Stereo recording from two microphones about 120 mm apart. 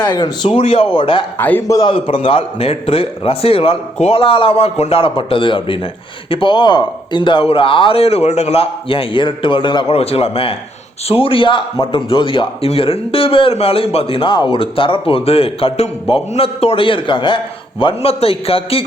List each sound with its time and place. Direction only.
0.0 s a man's voice: 40° left (ahead or behind)
1.4 s a man's voice: 15° left (ahead or behind)
1.6 s a man's voice: 30° left (ahead or behind)
1.9 s a man's voice: 50° left (ahead or behind)